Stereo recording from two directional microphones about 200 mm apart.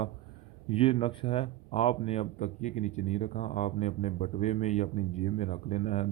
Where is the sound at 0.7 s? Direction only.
30° left (ahead or behind).